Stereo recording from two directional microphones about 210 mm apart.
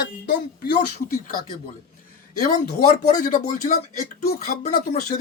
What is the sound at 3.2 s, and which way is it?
Speech, 35° left (ahead or behind).